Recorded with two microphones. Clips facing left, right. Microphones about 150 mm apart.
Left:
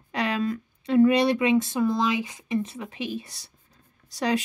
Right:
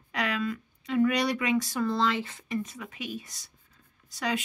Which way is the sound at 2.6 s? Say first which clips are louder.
Left 6 dB; 30° left (ahead or behind).